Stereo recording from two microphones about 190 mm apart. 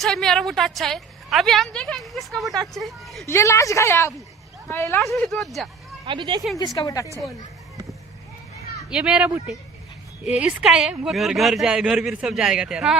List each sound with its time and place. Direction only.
0.0 s a woman's voice: centre (ahead or behind)
3.2 s a woman's voice: 15° left (ahead or behind)
4.9 s a woman's voice: centre (ahead or behind)
6.1 s speech: 25° right (ahead or behind)
6.7 s a woman's voice: 15° left (ahead or behind)
8.9 s a woman's voice: 5° right (ahead or behind)